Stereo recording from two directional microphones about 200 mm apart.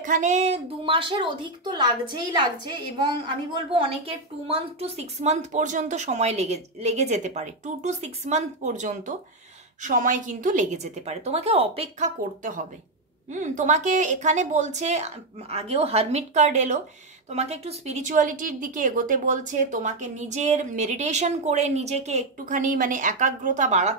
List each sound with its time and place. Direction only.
0.0 s a woman's voice: 40° right (ahead or behind)